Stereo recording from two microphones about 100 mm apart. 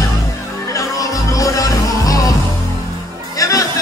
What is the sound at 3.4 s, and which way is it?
Music, 35° left (ahead or behind).